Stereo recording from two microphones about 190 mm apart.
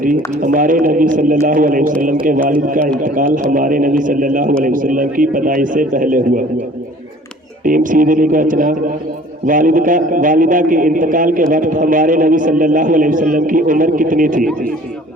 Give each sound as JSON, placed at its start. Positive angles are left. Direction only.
{"t": 0.4, "sound": "a man's voice", "side_deg": -45}
{"t": 7.6, "sound": "a man's voice", "side_deg": -45}